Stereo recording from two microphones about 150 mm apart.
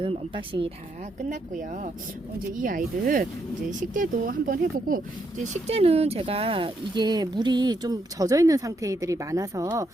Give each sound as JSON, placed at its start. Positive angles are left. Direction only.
{"t": 0.0, "sound": "speech", "side_deg": -35}
{"t": 1.3, "sound": "speech", "side_deg": -60}
{"t": 5.6, "sound": "speech", "side_deg": -45}